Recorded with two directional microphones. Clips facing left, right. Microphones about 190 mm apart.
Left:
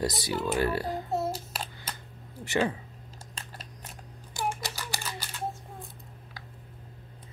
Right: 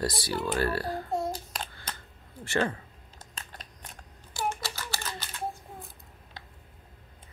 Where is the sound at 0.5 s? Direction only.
15° left (ahead or behind).